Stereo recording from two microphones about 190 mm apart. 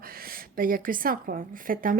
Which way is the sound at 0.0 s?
50° right (ahead or behind).